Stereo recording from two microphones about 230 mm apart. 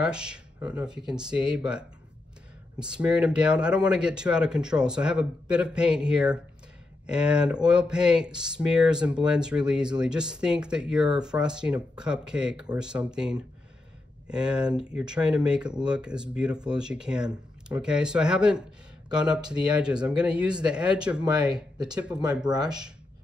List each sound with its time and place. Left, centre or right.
0.0 s speech: centre
19.0 s speech: centre
19.7 s speech: centre
21.2 s speech: centre